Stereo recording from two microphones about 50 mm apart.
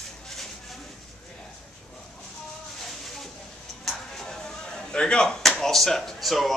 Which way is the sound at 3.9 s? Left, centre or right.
Centre.